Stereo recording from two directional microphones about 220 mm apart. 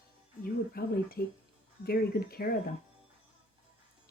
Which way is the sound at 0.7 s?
45° left (ahead or behind).